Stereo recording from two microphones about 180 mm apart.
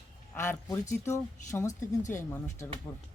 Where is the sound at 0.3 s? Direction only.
15° left (ahead or behind).